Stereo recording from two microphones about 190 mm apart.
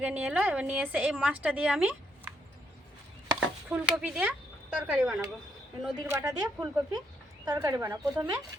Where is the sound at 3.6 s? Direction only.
5° right (ahead or behind).